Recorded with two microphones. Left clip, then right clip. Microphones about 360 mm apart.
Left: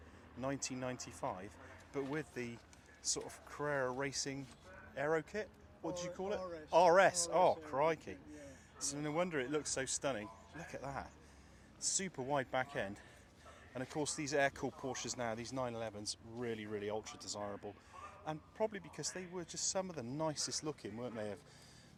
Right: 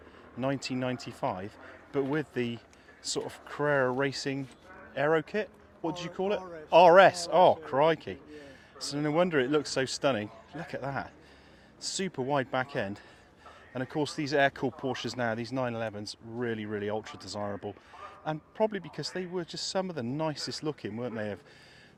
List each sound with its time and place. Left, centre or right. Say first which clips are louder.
0.3 s a man's voice: right 10 dB; right
10.6 s a man's voice: right 10 dB; right
11.8 s speech: right 7 dB; right
18.3 s speech: right 10 dB; right